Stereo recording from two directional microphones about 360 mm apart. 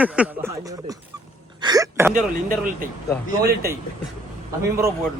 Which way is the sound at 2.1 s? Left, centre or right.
Right.